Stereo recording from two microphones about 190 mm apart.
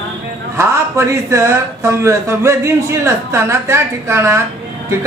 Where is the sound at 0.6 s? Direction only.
15° right (ahead or behind).